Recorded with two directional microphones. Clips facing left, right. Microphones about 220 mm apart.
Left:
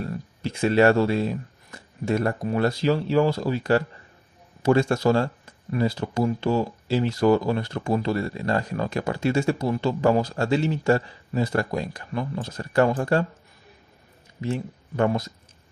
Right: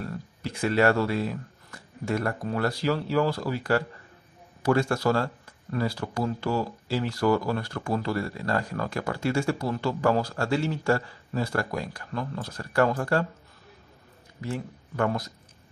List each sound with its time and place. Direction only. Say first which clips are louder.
0.0 s speech: left 4 dB; 20° left (ahead or behind)
14.4 s speech: left 5 dB; 20° left (ahead or behind)